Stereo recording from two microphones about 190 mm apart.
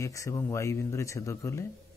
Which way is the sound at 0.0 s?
15° left (ahead or behind).